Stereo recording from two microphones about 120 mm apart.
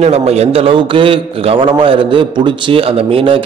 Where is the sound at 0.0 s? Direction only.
60° right (ahead or behind).